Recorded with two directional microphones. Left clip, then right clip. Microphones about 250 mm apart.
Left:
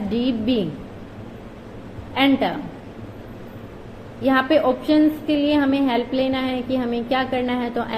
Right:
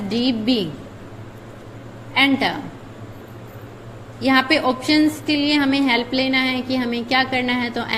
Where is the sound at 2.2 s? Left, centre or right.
Right.